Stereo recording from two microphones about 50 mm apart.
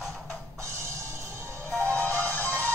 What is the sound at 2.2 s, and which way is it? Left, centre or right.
Music, left.